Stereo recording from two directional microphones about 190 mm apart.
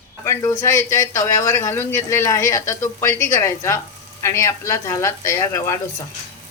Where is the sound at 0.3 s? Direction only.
15° left (ahead or behind).